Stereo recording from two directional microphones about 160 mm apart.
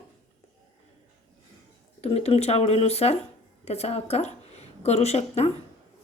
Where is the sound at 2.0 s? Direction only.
40° left (ahead or behind).